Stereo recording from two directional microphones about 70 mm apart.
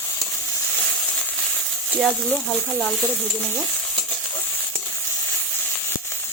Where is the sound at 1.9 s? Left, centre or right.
Centre.